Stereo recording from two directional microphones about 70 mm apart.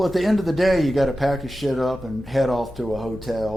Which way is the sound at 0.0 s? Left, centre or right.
Centre.